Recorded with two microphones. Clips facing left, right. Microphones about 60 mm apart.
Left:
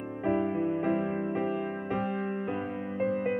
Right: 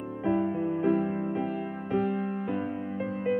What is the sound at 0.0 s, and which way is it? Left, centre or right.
Music, left.